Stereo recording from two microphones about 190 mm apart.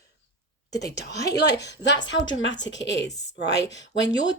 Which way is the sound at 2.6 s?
70° left (ahead or behind).